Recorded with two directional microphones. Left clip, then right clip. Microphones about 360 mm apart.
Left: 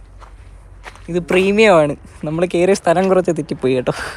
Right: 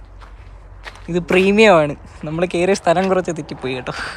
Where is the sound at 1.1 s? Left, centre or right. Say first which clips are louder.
Even; centre.